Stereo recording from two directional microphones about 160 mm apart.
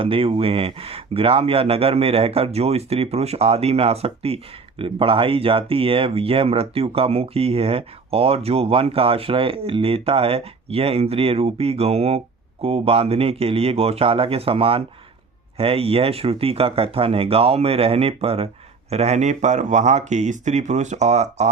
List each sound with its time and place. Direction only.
0.0 s speech: 35° right (ahead or behind)